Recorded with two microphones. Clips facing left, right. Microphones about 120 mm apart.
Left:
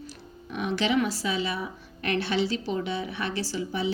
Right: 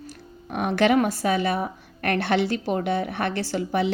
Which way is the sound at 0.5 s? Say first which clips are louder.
Right 6 dB; 55° right (ahead or behind).